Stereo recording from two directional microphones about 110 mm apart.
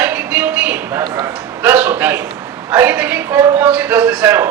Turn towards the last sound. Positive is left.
turn(degrees=-15)  # may be behind; listen again after turning